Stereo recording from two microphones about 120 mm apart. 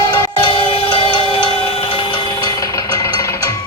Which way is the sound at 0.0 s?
25° left (ahead or behind).